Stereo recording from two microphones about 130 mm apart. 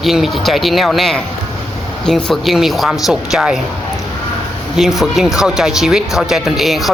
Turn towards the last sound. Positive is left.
turn(degrees=0)  # may be behind; listen again after turning